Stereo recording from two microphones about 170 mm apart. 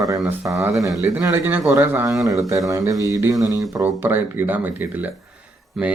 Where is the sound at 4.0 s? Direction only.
15° right (ahead or behind).